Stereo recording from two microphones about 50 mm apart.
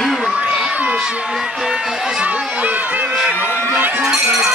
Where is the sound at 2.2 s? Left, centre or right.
Right.